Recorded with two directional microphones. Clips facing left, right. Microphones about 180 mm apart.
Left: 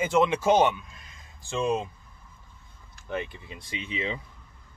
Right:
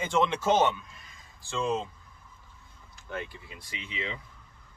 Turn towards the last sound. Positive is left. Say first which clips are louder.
# left 5 dB
turn(degrees=25)  # may be behind; listen again after turning